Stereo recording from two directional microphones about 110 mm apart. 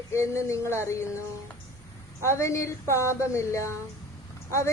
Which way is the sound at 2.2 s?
25° left (ahead or behind).